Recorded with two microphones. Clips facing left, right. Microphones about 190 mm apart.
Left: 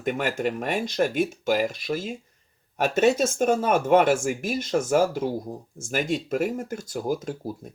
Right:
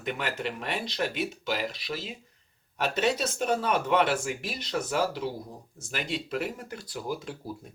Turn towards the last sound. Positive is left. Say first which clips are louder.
# left 7 dB
turn(degrees=45)  # may be behind; listen again after turning